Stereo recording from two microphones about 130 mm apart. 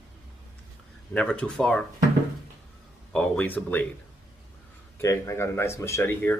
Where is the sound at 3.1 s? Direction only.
10° left (ahead or behind).